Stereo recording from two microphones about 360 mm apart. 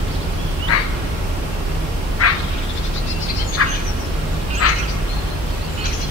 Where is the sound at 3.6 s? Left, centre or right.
Left.